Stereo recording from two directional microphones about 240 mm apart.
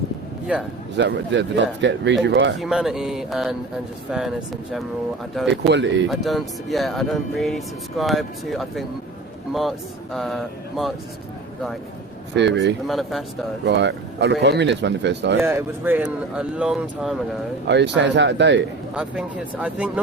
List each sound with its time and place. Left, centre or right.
0.5 s speech: centre
0.9 s speech: right
2.6 s speech: centre
5.6 s speech: right
6.1 s speech: centre
12.3 s speech: right
12.9 s speech: centre
13.7 s speech: right
15.4 s speech: centre
17.7 s speech: right
18.9 s speech: centre